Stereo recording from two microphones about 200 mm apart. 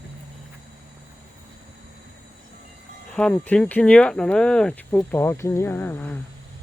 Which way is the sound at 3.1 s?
5° left (ahead or behind).